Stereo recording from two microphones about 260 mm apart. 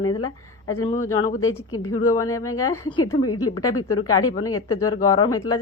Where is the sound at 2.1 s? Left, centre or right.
Centre.